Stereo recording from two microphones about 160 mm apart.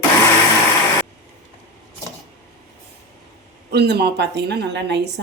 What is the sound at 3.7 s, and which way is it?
A woman's voice, 90° right.